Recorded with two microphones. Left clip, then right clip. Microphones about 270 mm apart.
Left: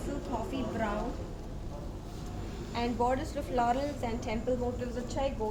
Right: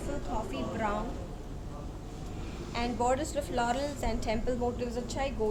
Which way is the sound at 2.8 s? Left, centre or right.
Right.